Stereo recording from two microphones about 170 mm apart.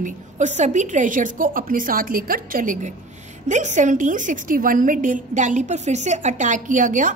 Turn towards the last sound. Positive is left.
turn(degrees=-50)  # may be behind; listen again after turning